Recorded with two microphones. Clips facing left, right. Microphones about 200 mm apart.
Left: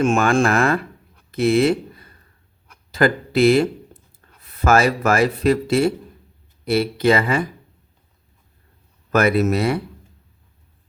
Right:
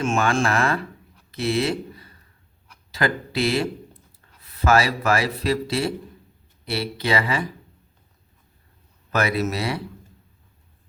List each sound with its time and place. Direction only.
0.0 s speech: 55° left (ahead or behind)
9.1 s speech: 50° left (ahead or behind)